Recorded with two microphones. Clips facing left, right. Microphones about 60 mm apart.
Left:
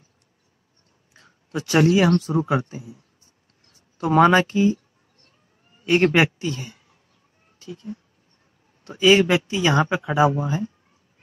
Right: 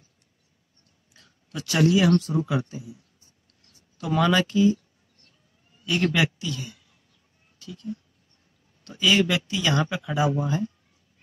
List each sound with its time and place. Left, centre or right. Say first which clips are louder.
1.1 s speech: left 7 dB; left
4.0 s speech: left 6 dB; left
5.9 s a man's voice: left 6 dB; left